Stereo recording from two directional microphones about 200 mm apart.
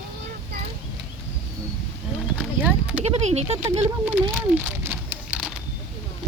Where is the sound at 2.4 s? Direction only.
5° right (ahead or behind).